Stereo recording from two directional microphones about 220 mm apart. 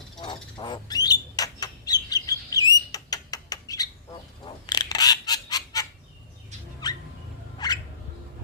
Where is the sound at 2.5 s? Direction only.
15° left (ahead or behind).